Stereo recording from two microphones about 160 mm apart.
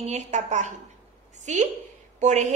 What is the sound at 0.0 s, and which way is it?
A woman's voice, 45° right (ahead or behind).